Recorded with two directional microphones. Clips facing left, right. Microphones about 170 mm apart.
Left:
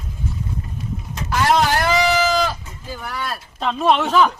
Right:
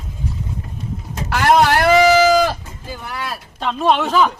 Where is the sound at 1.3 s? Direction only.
70° right (ahead or behind).